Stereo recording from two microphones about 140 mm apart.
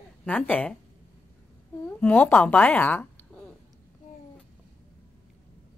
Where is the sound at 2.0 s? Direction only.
15° left (ahead or behind).